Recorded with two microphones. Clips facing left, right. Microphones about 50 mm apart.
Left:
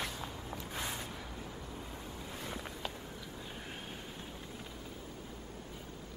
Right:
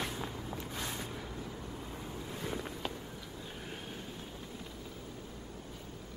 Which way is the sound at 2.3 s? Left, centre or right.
Centre.